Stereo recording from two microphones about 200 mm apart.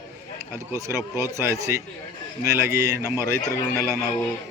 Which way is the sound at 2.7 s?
15° right (ahead or behind).